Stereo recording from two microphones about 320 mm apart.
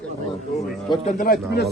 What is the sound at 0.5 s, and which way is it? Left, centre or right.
Speech, centre.